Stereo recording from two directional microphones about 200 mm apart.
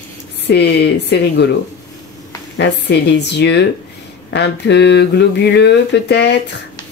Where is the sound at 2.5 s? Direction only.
55° left (ahead or behind).